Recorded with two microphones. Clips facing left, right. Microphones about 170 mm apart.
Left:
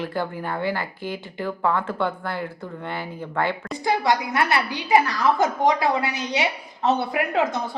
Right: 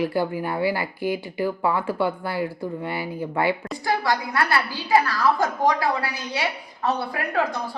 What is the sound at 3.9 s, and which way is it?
A woman's voice, 20° left (ahead or behind).